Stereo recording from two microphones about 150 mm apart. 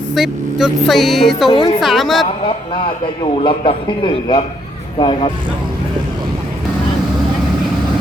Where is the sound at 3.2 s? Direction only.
35° left (ahead or behind).